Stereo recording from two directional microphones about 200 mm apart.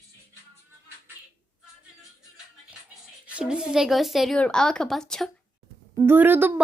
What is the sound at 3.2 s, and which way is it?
A woman's voice, 5° right (ahead or behind).